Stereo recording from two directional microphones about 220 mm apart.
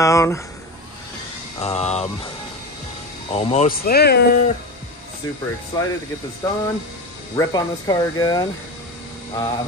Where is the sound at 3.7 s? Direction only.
45° left (ahead or behind).